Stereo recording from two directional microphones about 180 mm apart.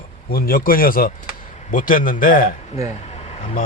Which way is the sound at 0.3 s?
55° left (ahead or behind).